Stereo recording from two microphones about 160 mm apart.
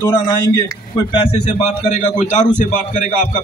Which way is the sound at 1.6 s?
50° left (ahead or behind).